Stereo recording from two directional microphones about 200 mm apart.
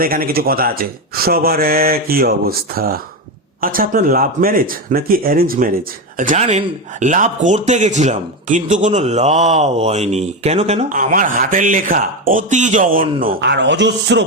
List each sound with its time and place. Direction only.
0.0 s speech: 50° right (ahead or behind)
13.4 s a man's voice: 60° right (ahead or behind)